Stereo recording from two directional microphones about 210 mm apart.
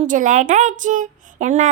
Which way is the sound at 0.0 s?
40° right (ahead or behind).